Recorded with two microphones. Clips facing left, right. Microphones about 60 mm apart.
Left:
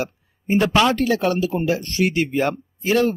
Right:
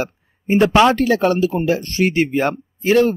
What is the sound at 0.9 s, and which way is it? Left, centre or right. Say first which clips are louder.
Speech: right 4 dB; right.